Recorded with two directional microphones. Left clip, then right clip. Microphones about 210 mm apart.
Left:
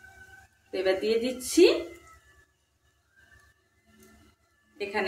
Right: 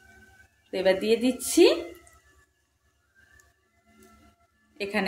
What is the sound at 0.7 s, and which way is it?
A woman's voice, 35° right (ahead or behind).